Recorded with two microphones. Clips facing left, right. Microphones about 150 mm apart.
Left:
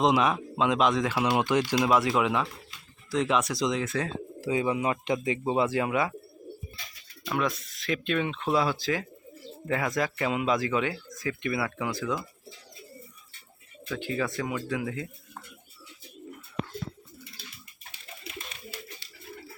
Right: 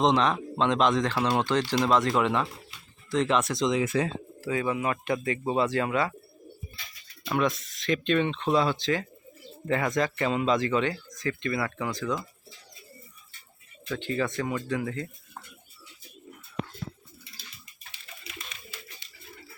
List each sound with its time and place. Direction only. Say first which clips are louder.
0.0 s speech: even; 5° left (ahead or behind)
3.8 s speech: right 4 dB; 10° right (ahead or behind)
4.4 s speech: left 2 dB; 20° left (ahead or behind)
7.3 s speech: right 3 dB; centre (ahead or behind)
13.9 s speech: right 1 dB; 5° left (ahead or behind)
18.3 s pigeon: left 4 dB; 35° left (ahead or behind)